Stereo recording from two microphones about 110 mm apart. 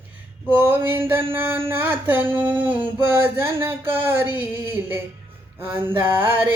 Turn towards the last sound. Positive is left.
turn(degrees=-20)  # may be behind; listen again after turning